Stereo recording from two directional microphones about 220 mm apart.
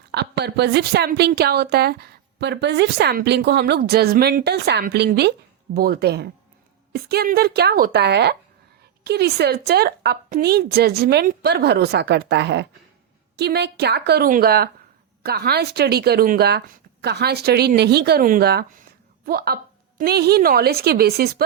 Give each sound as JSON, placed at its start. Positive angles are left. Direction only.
{"t": 0.1, "sound": "a woman's voice", "side_deg": -50}